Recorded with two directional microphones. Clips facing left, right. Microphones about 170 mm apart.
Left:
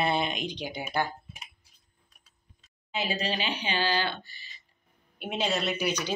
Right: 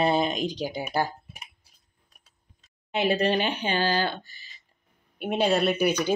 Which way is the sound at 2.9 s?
60° right (ahead or behind).